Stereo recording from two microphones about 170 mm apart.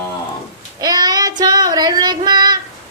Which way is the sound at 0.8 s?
20° right (ahead or behind).